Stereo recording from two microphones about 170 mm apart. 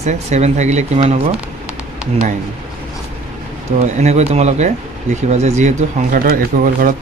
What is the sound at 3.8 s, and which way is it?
Speech, 40° right (ahead or behind).